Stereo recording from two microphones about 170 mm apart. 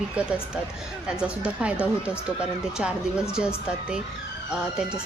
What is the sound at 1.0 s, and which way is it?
Speech, 5° right (ahead or behind).